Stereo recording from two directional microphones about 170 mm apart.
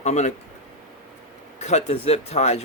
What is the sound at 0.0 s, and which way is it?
Speech, 45° left (ahead or behind).